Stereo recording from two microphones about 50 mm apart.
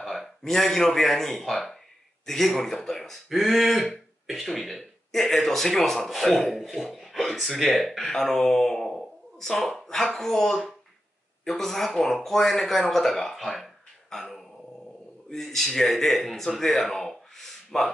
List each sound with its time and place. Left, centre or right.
0.0 s speech: centre